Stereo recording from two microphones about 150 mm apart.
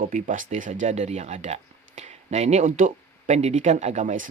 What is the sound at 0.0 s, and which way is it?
Speech, 60° right (ahead or behind).